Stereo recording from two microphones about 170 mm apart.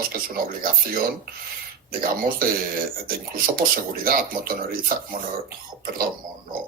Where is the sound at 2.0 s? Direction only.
60° right (ahead or behind).